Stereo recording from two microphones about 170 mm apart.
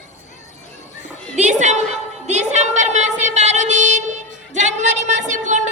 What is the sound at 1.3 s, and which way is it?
Music, 45° right (ahead or behind).